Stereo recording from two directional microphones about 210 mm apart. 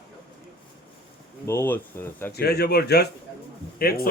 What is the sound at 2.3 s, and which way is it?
Speech, 50° left (ahead or behind).